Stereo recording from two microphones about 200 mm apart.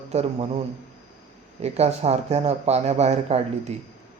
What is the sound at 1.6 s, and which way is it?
Speech, 30° right (ahead or behind).